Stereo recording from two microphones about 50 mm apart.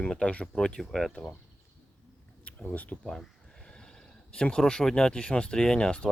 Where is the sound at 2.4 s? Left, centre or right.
Left.